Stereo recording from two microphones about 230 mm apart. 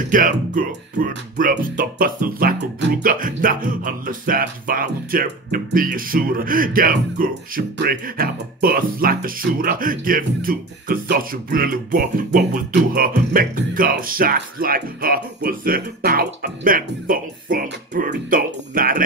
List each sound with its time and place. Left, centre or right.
0.0 s speech: right